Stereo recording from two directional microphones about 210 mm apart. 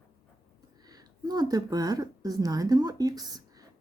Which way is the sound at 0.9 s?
20° right (ahead or behind).